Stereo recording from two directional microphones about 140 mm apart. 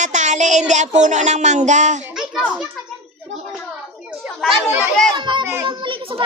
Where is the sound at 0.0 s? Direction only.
60° right (ahead or behind).